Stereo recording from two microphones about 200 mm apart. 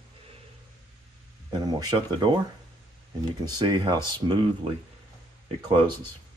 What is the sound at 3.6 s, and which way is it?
Speech, 20° right (ahead or behind).